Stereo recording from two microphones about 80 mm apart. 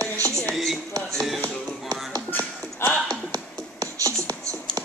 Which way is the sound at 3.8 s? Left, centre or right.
Right.